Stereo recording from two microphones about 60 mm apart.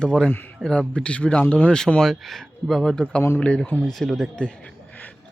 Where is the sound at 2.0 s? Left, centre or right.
Centre.